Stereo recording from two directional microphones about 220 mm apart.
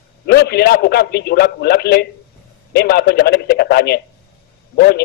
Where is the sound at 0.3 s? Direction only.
45° left (ahead or behind).